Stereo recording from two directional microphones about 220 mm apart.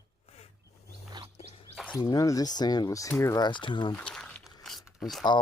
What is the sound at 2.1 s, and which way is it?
Speech, 15° left (ahead or behind).